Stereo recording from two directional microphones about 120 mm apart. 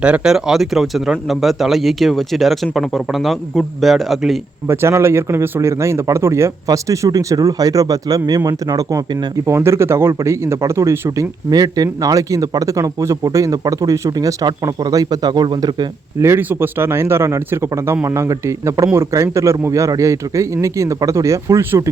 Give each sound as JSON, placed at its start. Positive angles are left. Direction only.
{"t": 0.0, "sound": "speech", "side_deg": -10}
{"t": 4.7, "sound": "a man's voice", "side_deg": -20}
{"t": 11.4, "sound": "a man's voice", "side_deg": -30}
{"t": 16.2, "sound": "a man's voice", "side_deg": -20}